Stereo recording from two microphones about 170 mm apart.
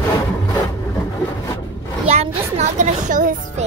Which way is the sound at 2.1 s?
40° right (ahead or behind).